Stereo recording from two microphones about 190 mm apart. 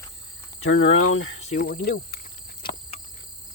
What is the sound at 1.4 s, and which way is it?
Speech, 40° left (ahead or behind).